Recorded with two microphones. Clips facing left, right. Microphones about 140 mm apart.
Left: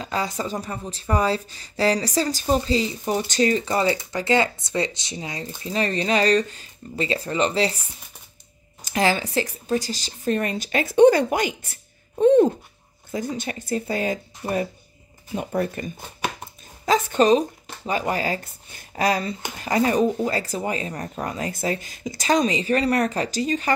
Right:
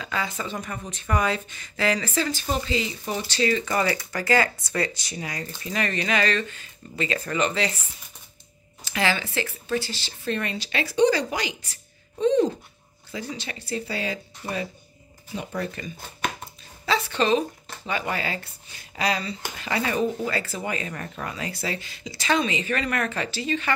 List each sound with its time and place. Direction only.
0.0 s speech: 40° left (ahead or behind)
8.8 s speech: 40° left (ahead or behind)